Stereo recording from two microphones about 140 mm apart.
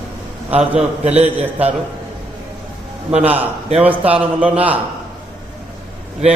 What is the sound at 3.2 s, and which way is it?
A man's voice, 10° right (ahead or behind).